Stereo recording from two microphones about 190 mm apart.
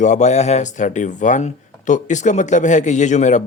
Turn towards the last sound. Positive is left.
turn(degrees=40)  # may be behind; listen again after turning